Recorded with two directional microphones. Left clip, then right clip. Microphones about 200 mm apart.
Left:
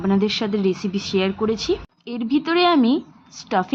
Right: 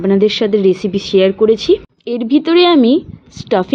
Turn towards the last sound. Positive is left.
turn(degrees=-20)  # may be behind; listen again after turning